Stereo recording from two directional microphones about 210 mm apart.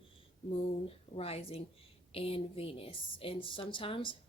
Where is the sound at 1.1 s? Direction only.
25° left (ahead or behind).